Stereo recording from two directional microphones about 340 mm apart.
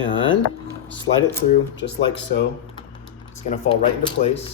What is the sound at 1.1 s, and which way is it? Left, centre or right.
Speech, left.